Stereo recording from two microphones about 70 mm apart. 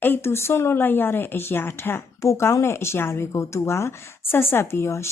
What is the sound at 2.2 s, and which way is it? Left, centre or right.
A woman's voice, left.